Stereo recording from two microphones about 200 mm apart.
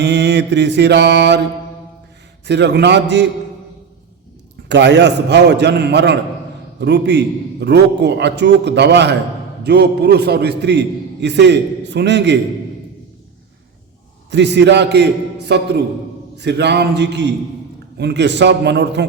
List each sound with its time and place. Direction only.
0.0 s a man's voice: 60° right (ahead or behind)
2.5 s a man's voice: 60° right (ahead or behind)
4.7 s a man's voice: 60° right (ahead or behind)
14.3 s a man's voice: 60° right (ahead or behind)